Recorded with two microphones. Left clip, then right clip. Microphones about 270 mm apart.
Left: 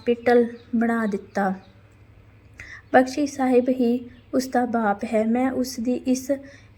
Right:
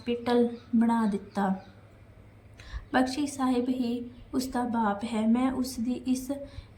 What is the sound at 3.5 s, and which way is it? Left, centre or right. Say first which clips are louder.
Speech: left 10 dB; left.